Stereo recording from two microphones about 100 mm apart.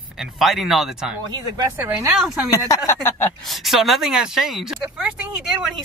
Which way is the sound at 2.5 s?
35° left (ahead or behind).